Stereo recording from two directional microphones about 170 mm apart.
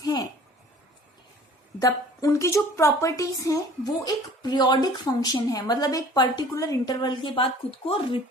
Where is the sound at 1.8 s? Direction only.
20° left (ahead or behind).